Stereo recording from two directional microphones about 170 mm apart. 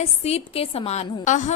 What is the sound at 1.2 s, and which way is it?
Speech, 45° left (ahead or behind).